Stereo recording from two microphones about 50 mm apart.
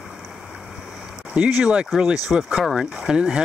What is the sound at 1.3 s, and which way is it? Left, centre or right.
Speech, right.